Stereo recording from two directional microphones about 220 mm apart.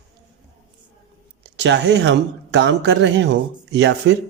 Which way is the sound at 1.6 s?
50° right (ahead or behind).